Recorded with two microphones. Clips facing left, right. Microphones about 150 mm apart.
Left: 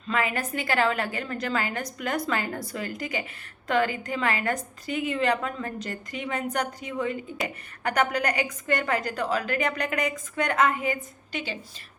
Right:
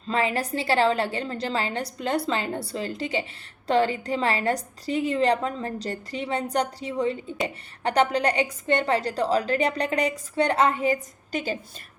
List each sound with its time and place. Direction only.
0.1 s a woman's voice: 30° right (ahead or behind)